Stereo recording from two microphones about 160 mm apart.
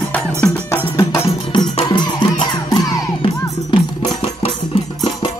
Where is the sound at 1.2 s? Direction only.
40° left (ahead or behind).